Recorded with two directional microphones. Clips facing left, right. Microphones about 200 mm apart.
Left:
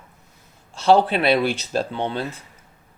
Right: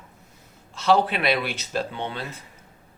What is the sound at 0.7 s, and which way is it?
Speech, 30° left (ahead or behind).